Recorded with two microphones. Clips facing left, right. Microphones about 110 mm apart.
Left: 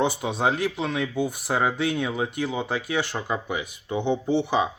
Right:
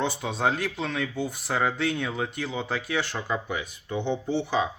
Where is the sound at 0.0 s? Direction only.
5° left (ahead or behind).